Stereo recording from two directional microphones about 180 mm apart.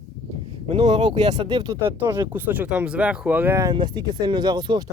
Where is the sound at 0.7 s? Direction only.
25° right (ahead or behind).